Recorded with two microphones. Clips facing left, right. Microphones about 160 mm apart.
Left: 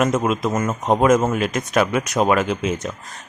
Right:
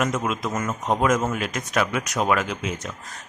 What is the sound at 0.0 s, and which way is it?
Speech, 25° left (ahead or behind).